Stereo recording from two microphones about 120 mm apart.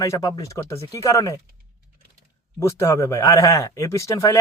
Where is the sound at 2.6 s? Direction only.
25° left (ahead or behind).